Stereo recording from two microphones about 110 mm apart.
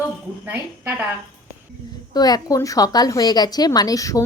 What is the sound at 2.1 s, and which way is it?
A woman's voice, 35° left (ahead or behind).